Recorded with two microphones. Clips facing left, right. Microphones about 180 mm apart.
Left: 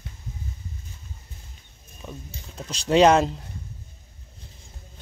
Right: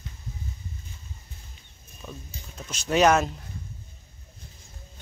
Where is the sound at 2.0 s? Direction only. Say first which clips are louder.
Left 2 dB; 15° left (ahead or behind).